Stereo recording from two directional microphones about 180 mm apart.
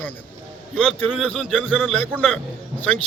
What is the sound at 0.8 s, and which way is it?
A man's voice, 5° left (ahead or behind).